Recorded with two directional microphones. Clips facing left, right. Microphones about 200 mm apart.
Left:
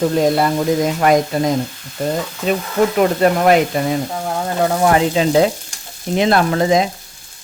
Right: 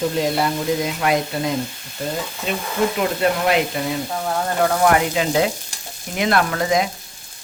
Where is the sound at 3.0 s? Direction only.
50° left (ahead or behind).